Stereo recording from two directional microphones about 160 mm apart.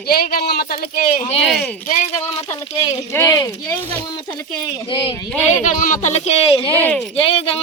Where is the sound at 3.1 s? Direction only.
20° left (ahead or behind).